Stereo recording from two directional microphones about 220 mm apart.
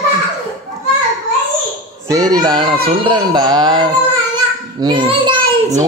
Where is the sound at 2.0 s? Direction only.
15° right (ahead or behind).